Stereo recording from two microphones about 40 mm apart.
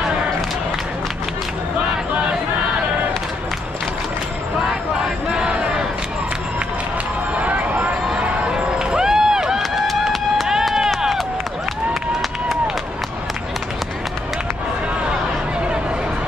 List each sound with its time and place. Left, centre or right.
7.3 s run: right; by 9.6 s centre
9.6 s run: centre